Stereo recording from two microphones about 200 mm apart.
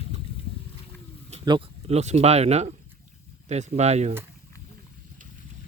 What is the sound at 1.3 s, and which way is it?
Speech, 30° right (ahead or behind).